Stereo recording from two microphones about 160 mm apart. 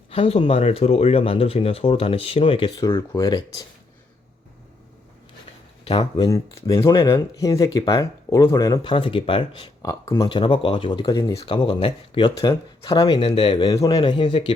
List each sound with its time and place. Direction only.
0.1 s speech: 35° left (ahead or behind)
2.8 s speech: 20° left (ahead or behind)
5.9 s speech: 25° left (ahead or behind)
9.8 s speech: 20° left (ahead or behind)
11.3 s speech: 35° left (ahead or behind)
13.1 s speech: 35° left (ahead or behind)